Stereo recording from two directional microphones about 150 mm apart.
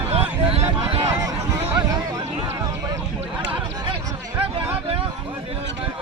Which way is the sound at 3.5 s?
35° right (ahead or behind).